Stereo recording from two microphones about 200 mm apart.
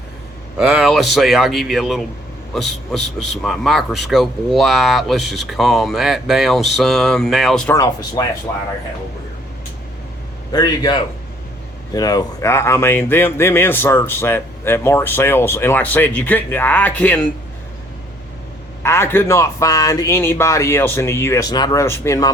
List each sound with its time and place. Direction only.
0.6 s a man's voice: 5° right (ahead or behind)
7.7 s speech: 15° left (ahead or behind)
10.5 s a man's voice: 20° left (ahead or behind)
18.8 s speech: 10° left (ahead or behind)